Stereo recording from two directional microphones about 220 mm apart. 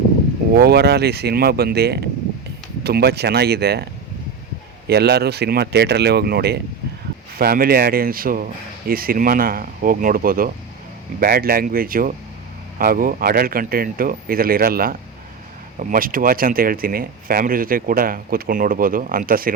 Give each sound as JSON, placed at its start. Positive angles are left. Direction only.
{"t": 0.5, "sound": "speech", "side_deg": -45}
{"t": 4.9, "sound": "speech", "side_deg": -45}